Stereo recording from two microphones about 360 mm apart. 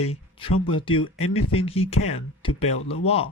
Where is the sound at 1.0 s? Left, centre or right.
Left.